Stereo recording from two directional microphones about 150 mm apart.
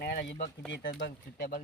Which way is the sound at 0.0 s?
90° left.